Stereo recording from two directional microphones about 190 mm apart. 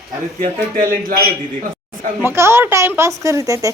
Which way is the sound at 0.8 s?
50° right (ahead or behind).